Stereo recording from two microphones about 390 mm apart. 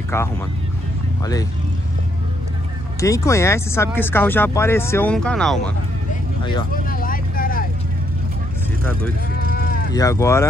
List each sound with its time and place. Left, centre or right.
0.1 s speech: centre
3.0 s speech: centre
6.4 s vehicle: centre
9.4 s vehicle: left
9.9 s speech: centre